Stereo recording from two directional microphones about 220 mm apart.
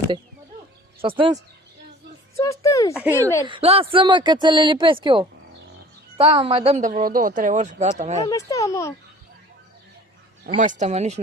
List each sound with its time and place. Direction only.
1.0 s speech: 20° right (ahead or behind)
2.3 s speech: 15° left (ahead or behind)
2.9 s speech: 10° right (ahead or behind)
3.4 s a woman's voice: 25° right (ahead or behind)
8.3 s speech: 15° left (ahead or behind)
10.6 s a woman's voice: 35° right (ahead or behind)